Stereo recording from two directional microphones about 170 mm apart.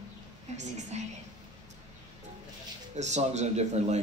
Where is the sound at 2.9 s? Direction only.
40° right (ahead or behind).